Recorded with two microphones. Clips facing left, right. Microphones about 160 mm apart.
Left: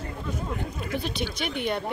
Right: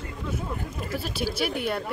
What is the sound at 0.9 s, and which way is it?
Speech, 5° right (ahead or behind).